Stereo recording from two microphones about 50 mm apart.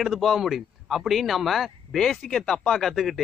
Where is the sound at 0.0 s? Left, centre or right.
Centre.